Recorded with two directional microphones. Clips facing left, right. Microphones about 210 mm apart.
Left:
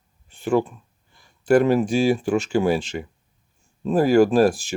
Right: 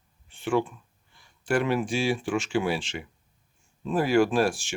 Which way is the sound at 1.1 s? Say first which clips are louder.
Left 9 dB; 40° left (ahead or behind).